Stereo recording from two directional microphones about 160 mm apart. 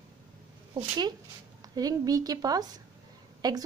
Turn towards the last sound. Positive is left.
turn(degrees=-25)  # may be behind; listen again after turning